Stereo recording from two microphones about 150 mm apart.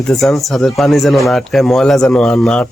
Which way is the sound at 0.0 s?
5° left (ahead or behind).